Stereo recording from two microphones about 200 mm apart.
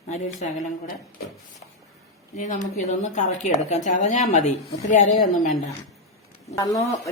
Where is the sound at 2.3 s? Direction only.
40° left (ahead or behind).